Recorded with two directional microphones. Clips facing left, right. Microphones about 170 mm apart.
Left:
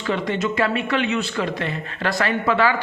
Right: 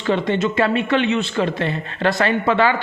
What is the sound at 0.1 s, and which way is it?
Speech, 25° right (ahead or behind).